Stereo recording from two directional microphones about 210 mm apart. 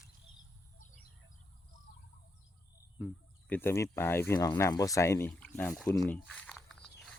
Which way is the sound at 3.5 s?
10° left (ahead or behind).